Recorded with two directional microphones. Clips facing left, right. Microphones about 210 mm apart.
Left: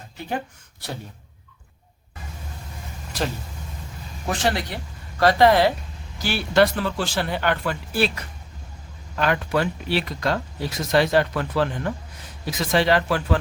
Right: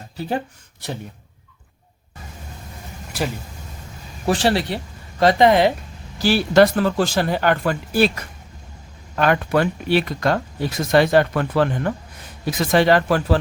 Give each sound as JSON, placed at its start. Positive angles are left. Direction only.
{"t": 4.3, "sound": "speech", "side_deg": -30}
{"t": 5.2, "sound": "speech", "side_deg": -20}
{"t": 6.1, "sound": "speech", "side_deg": -35}
{"t": 9.1, "sound": "speech", "side_deg": -55}